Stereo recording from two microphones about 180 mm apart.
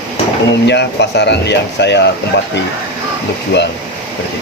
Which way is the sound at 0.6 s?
70° left (ahead or behind).